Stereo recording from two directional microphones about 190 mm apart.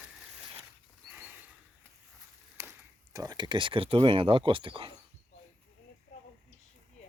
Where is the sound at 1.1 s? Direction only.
10° right (ahead or behind).